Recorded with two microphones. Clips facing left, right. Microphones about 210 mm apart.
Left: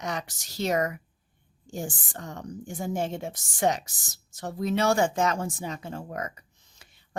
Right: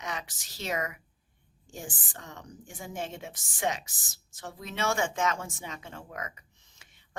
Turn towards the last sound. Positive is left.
turn(degrees=35)  # may be behind; listen again after turning